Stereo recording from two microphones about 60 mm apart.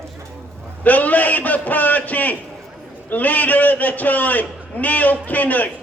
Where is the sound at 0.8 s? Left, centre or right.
Left.